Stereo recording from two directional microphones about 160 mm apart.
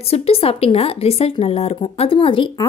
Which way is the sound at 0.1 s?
40° left (ahead or behind).